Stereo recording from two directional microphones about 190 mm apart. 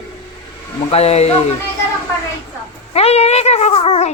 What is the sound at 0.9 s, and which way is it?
Speech, 35° left (ahead or behind).